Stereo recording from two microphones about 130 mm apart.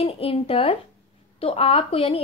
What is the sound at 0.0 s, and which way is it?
A woman's voice, 45° left (ahead or behind).